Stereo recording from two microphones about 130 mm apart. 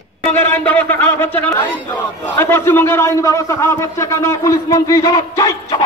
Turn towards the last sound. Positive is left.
turn(degrees=25)  # may be behind; listen again after turning